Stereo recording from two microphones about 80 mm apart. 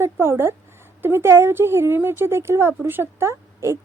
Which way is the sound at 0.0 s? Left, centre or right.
Right.